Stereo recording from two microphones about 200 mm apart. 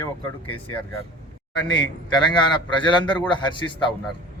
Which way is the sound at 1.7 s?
20° left (ahead or behind).